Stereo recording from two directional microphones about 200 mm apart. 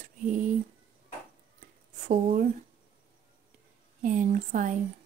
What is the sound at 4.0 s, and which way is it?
Speech, 40° right (ahead or behind).